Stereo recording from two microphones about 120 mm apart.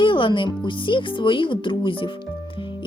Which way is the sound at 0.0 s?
45° left (ahead or behind).